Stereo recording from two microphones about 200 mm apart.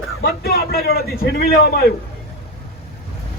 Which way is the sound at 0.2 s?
50° left (ahead or behind).